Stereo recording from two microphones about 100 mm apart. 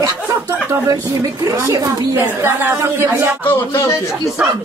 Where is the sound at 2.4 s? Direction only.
25° right (ahead or behind).